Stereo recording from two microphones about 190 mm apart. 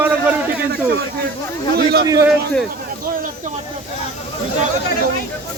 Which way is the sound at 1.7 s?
55° right (ahead or behind).